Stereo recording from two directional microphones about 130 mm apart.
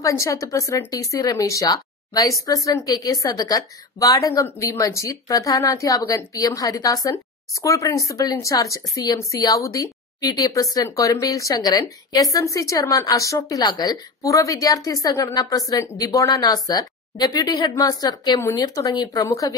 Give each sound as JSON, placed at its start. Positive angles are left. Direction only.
{"t": 0.0, "sound": "a woman's voice", "side_deg": 25}